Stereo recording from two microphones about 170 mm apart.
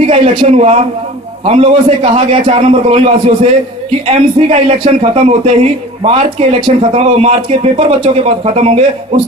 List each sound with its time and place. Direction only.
0.1 s speech: 35° right (ahead or behind)